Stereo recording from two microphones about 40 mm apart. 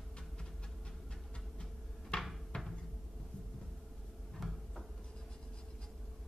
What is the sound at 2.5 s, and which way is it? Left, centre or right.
Cupboard open or close, left.